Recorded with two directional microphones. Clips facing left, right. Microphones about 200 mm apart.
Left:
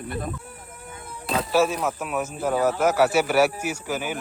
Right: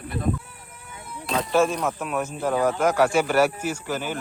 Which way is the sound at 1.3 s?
5° left (ahead or behind).